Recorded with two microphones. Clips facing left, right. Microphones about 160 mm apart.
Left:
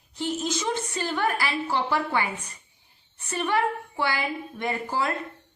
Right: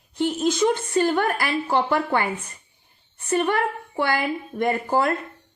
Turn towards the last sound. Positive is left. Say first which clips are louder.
# right 6 dB
turn(degrees=-50)  # may be behind; listen again after turning